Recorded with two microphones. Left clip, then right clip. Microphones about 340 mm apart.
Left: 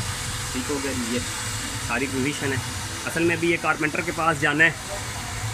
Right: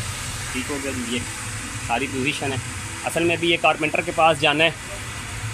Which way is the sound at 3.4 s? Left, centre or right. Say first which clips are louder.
Right 3 dB; centre.